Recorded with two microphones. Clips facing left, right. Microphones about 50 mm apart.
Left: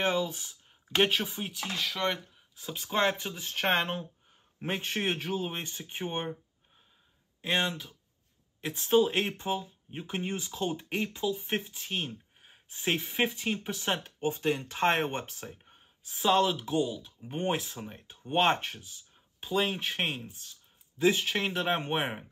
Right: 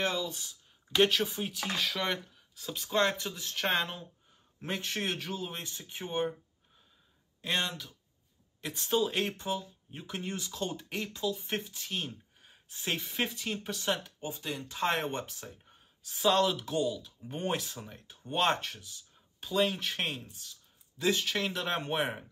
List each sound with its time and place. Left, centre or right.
0.0 s speech: left
0.9 s speech: centre
2.3 s speech: centre
7.4 s speech: left
13.8 s speech: left
15.0 s speech: left
16.1 s speech: centre
16.9 s speech: left
20.1 s speech: left
21.0 s speech: left